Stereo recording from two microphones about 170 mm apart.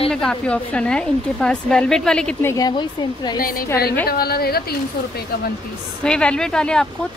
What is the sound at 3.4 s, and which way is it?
A woman's voice, 55° left (ahead or behind).